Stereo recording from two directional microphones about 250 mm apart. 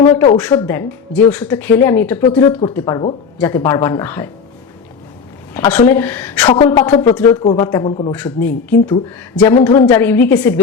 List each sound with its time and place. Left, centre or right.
0.5 s speech: centre
5.5 s speech: centre
6.5 s a woman's voice: centre